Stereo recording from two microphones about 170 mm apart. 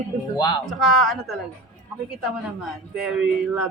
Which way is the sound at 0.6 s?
Centre (ahead or behind).